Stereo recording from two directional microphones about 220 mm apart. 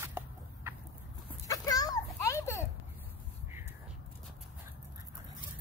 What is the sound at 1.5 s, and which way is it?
Children playing, 15° left (ahead or behind).